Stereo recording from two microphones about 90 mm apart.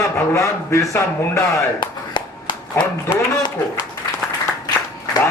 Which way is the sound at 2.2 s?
70° left (ahead or behind).